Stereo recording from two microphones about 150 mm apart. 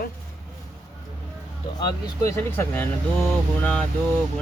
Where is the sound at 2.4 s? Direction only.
15° left (ahead or behind).